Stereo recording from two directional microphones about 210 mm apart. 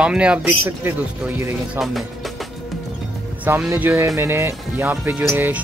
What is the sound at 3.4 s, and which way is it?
Speech, 10° right (ahead or behind).